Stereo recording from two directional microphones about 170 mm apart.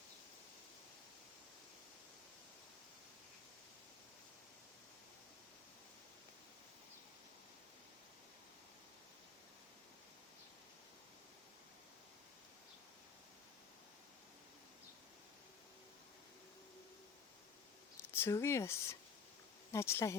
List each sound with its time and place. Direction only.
18.0 s speech: 15° left (ahead or behind)